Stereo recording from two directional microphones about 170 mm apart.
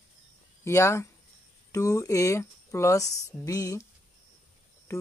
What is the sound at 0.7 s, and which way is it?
Speech, 15° left (ahead or behind).